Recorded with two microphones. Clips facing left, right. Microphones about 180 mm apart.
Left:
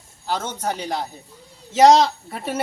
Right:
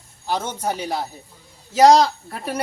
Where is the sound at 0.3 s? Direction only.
10° right (ahead or behind).